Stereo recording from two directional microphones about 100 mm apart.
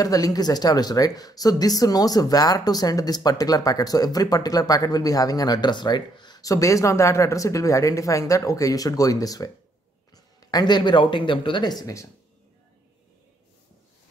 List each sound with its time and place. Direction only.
0.0 s speech: 40° left (ahead or behind)